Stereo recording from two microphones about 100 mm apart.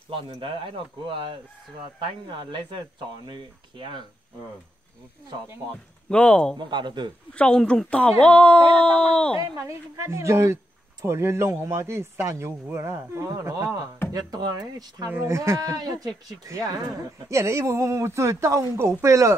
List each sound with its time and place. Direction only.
0.1 s speech: 60° right (ahead or behind)
2.2 s speech: 55° right (ahead or behind)
6.0 s speech: 10° left (ahead or behind)
6.6 s speech: 50° right (ahead or behind)
7.3 s speech: 10° left (ahead or behind)
9.4 s speech: 30° right (ahead or behind)
15.0 s speech: 25° right (ahead or behind)